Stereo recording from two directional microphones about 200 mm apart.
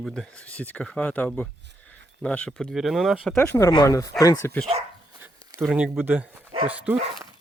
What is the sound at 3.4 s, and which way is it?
Speech, 10° left (ahead or behind).